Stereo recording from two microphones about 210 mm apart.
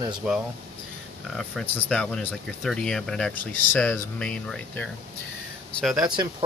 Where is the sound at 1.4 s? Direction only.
5° left (ahead or behind).